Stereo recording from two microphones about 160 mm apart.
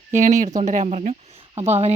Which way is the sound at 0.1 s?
50° right (ahead or behind).